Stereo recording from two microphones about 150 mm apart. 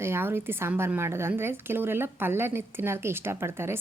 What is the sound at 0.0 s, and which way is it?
A woman's voice, 15° right (ahead or behind).